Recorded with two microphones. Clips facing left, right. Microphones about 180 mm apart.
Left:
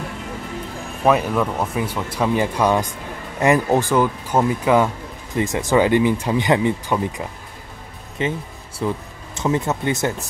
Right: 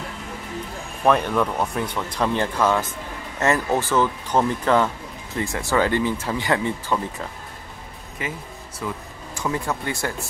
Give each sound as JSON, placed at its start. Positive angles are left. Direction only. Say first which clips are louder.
{"t": 1.0, "sound": "speech", "louder": "left 2 dB", "side_deg": 5}
{"t": 8.2, "sound": "speech", "louder": "left 8 dB", "side_deg": 30}